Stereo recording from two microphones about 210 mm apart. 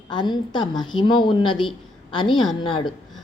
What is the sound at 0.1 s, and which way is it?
A woman's voice, 20° left (ahead or behind).